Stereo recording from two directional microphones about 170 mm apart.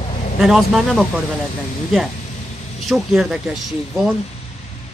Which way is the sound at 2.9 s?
Centre (ahead or behind).